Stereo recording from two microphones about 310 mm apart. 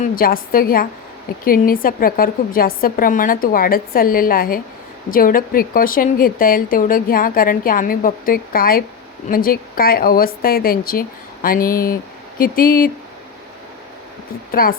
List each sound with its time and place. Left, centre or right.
0.0 s a woman's voice: left
14.5 s a woman's voice: left